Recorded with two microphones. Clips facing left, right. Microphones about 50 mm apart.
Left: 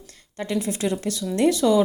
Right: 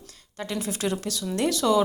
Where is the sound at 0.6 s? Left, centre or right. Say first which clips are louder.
Left 3 dB; left.